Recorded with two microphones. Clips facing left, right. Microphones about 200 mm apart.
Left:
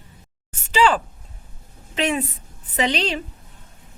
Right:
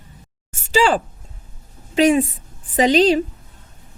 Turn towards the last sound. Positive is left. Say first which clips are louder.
# right 9 dB
turn(degrees=-40)  # may be behind; listen again after turning